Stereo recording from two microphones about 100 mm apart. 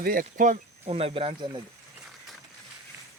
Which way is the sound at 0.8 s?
85° right.